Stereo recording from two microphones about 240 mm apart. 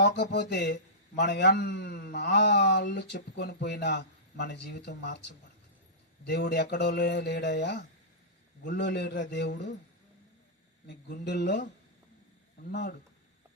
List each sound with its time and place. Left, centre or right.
0.0 s a man's voice: left
6.2 s a man's voice: left
10.8 s a man's voice: left